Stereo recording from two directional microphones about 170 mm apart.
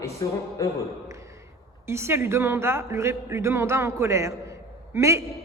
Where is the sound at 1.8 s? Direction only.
15° right (ahead or behind).